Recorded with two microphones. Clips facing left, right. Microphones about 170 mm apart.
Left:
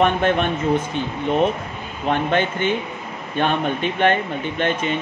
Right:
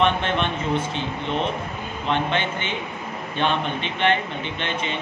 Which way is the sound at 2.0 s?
50° left (ahead or behind).